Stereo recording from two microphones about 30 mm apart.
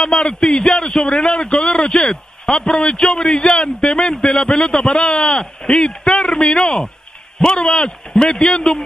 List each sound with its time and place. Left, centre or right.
0.0 s a man's voice: left